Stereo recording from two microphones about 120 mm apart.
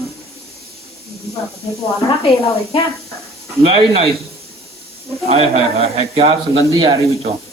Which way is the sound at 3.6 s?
50° right (ahead or behind).